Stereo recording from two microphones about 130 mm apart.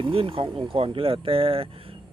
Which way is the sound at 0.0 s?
45° right (ahead or behind).